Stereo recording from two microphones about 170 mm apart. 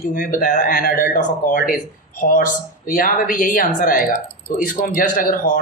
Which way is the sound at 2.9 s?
55° left (ahead or behind).